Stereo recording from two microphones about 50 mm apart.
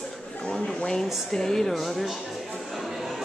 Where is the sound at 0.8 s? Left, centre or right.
Centre.